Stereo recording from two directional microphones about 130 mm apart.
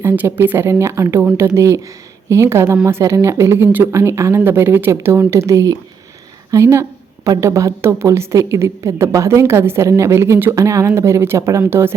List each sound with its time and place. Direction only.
0.0 s a woman's voice: 20° right (ahead or behind)